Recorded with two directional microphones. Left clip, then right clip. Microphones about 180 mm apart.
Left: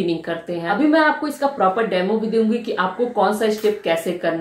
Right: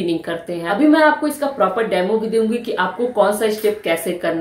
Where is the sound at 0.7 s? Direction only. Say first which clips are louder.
Right 3 dB; 10° right (ahead or behind).